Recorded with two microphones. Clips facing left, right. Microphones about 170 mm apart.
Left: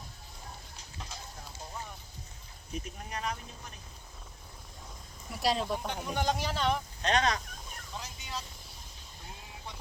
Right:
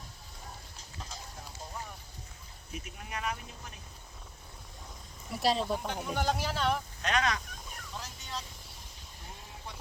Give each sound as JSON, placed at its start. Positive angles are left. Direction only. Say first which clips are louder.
{"t": 2.7, "sound": "speech", "louder": "left 2 dB", "side_deg": 35}
{"t": 5.3, "sound": "speech", "louder": "right 1 dB", "side_deg": 0}
{"t": 7.0, "sound": "speech", "louder": "left 3 dB", "side_deg": 35}
{"t": 7.9, "sound": "vehicle", "louder": "left 1 dB", "side_deg": 0}